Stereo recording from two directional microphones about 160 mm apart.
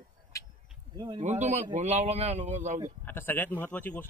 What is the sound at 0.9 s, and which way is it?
Speech, 30° right (ahead or behind).